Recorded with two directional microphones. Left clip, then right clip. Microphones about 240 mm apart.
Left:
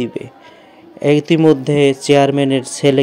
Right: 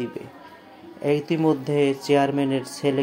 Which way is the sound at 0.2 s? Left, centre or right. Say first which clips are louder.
Left 9 dB; left.